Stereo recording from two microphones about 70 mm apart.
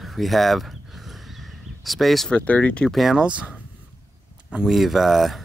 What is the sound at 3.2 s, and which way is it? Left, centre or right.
Speech, centre.